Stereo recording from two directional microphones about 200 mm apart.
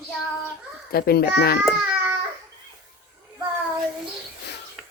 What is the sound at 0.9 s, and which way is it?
Speech, 50° left (ahead or behind).